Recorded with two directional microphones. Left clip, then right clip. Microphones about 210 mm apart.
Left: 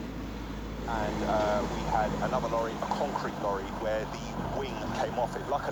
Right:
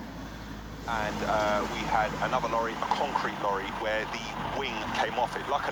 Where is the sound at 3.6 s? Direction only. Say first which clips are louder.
Right 2 dB; 20° right (ahead or behind).